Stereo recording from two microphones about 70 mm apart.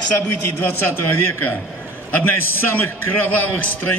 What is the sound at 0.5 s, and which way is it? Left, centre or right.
A man's voice, left.